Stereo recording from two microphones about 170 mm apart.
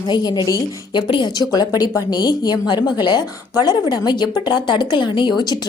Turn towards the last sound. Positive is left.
turn(degrees=25)  # may be behind; listen again after turning